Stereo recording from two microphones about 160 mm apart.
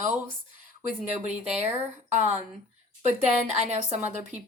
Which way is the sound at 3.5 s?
45° right (ahead or behind).